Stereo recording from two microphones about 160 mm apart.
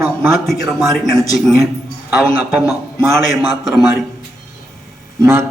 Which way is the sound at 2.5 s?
15° right (ahead or behind).